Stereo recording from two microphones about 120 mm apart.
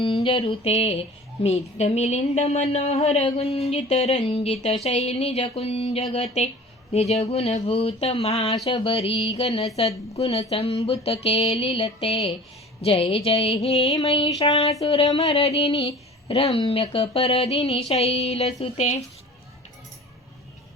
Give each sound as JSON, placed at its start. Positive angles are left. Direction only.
{"t": 0.0, "sound": "music", "side_deg": 45}
{"t": 8.7, "sound": "speech", "side_deg": 55}
{"t": 9.4, "sound": "music", "side_deg": 55}
{"t": 10.5, "sound": "speech", "side_deg": 60}
{"t": 13.9, "sound": "music", "side_deg": 55}
{"t": 14.8, "sound": "speech", "side_deg": 55}
{"t": 18.6, "sound": "speech", "side_deg": 70}